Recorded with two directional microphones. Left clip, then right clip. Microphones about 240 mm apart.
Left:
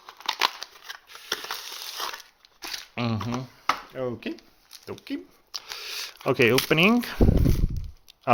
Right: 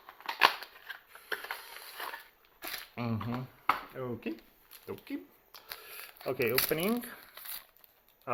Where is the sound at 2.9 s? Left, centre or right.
Left.